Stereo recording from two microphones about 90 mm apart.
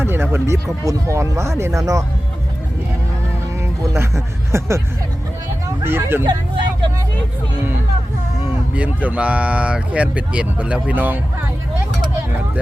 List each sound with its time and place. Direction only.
0.0 s speech: 25° right (ahead or behind)
3.6 s speech: 30° right (ahead or behind)
5.8 s speech: 25° right (ahead or behind)
9.0 s speech: 15° right (ahead or behind)